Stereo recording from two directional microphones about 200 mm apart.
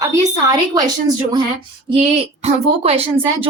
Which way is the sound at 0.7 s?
20° right (ahead or behind).